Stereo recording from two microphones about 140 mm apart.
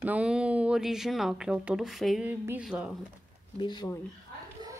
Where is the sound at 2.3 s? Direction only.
10° right (ahead or behind).